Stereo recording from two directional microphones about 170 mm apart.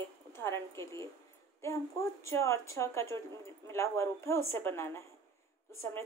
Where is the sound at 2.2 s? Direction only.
15° left (ahead or behind).